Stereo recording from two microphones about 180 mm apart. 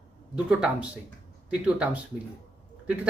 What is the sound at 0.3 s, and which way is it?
Speech, 5° right (ahead or behind).